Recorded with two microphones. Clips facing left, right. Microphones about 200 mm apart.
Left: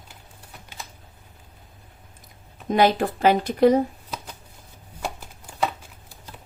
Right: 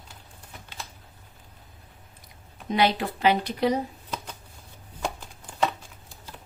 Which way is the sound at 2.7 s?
50° left (ahead or behind).